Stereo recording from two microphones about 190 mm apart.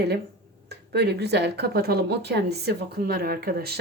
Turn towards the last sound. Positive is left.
turn(degrees=-55)  # may be behind; listen again after turning